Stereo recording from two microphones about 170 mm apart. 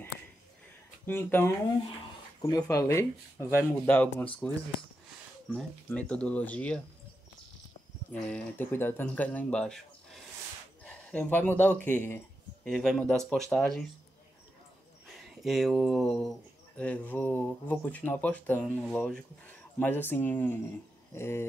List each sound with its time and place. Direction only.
1.0 s speech: 10° left (ahead or behind)
5.9 s speech: 5° left (ahead or behind)
8.1 s speech: 5° left (ahead or behind)
12.6 s speech: centre (ahead or behind)
15.1 s speech: centre (ahead or behind)